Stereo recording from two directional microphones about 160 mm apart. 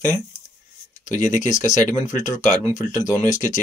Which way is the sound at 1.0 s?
50° left (ahead or behind).